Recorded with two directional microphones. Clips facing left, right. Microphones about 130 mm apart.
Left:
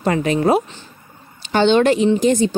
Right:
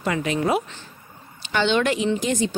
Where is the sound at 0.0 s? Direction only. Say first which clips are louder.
Left 6 dB; 40° left (ahead or behind).